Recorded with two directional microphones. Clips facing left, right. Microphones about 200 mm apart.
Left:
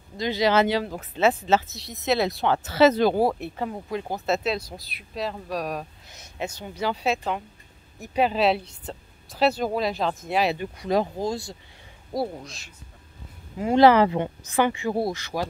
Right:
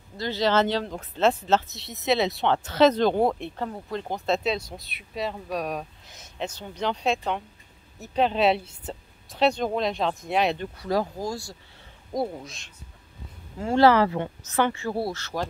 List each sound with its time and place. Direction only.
0.2 s speech: 15° left (ahead or behind)
10.8 s speech: 20° left (ahead or behind)
12.1 s speech: 5° left (ahead or behind)
13.6 s speech: 15° left (ahead or behind)